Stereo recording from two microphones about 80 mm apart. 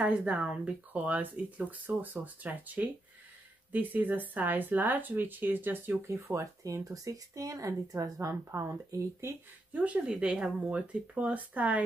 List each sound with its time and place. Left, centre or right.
0.0 s speech: centre; by 9.4 s right
9.7 s speech: centre